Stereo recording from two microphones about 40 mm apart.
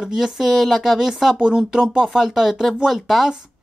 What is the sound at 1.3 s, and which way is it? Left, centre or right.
Speech, centre.